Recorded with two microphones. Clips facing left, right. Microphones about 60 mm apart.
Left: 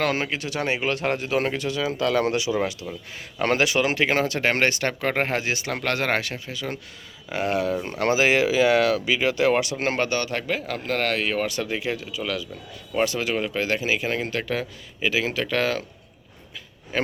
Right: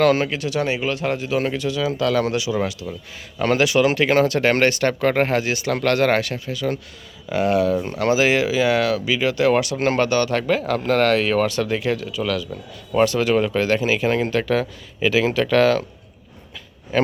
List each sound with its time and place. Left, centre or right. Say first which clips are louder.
0.0 s speech: right 7 dB; left
2.5 s speech: right 2 dB; left; by 15.8 s centre
16.9 s speech: right 6 dB; centre